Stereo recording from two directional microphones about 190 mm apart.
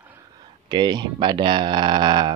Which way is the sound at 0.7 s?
25° right (ahead or behind).